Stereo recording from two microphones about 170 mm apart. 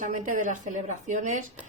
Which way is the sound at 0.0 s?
50° right (ahead or behind).